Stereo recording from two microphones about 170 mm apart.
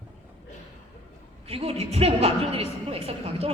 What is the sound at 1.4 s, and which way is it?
A woman's voice, 35° right (ahead or behind).